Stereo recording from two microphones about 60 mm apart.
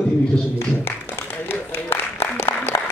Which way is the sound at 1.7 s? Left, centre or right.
Left.